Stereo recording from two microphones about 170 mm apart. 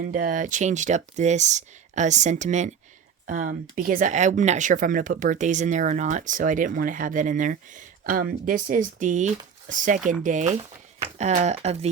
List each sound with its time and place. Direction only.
0.0 s speech: 55° right (ahead or behind)
10.5 s speech: 40° right (ahead or behind)